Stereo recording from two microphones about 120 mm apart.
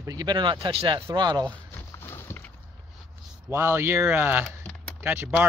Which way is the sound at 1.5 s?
20° left (ahead or behind).